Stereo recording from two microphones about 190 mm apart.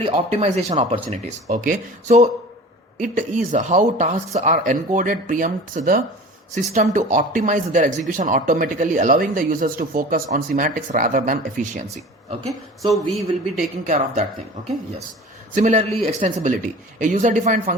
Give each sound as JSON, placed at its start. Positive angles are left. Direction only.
{"t": 0.0, "sound": "speech", "side_deg": -35}
{"t": 1.5, "sound": "speech", "side_deg": -45}
{"t": 12.5, "sound": "a woman's voice", "side_deg": 0}
{"t": 13.8, "sound": "speech", "side_deg": -40}
{"t": 15.5, "sound": "speech", "side_deg": -35}